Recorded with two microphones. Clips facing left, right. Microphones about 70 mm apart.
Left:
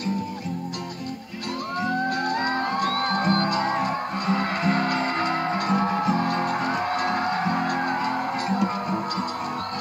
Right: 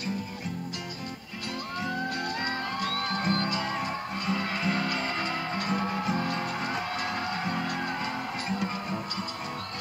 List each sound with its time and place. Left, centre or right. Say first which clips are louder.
1.9 s music: left 8 dB; left